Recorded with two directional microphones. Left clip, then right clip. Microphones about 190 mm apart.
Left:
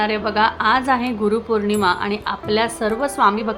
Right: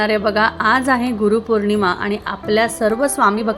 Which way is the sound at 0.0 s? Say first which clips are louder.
Right 2 dB; 20° right (ahead or behind).